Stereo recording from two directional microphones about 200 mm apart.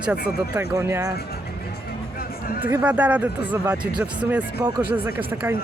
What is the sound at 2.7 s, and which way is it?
Speech, 10° right (ahead or behind).